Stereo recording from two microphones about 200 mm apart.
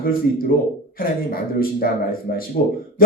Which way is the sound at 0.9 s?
45° left (ahead or behind).